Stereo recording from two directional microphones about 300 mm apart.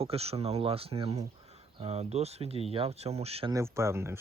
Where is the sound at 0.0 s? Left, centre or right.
Centre.